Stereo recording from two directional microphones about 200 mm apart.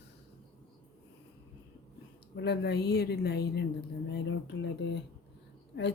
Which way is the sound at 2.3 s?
55° left (ahead or behind).